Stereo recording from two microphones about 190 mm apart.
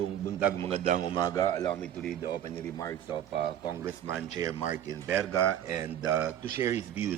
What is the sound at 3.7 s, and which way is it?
Speech, 15° right (ahead or behind).